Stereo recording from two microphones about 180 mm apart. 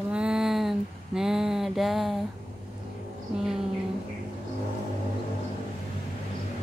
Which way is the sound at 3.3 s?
5° right (ahead or behind).